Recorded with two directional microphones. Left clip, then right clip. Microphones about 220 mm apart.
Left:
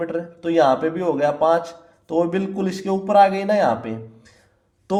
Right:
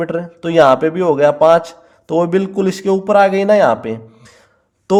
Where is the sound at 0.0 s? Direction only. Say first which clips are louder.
Right 5 dB; 35° right (ahead or behind).